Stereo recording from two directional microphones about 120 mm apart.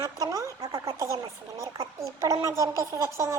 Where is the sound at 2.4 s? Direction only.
25° right (ahead or behind).